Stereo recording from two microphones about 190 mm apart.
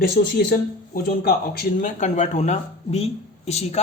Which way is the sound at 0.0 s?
50° left (ahead or behind).